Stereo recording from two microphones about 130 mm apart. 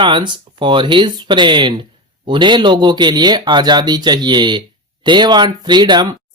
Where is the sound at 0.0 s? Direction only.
40° right (ahead or behind).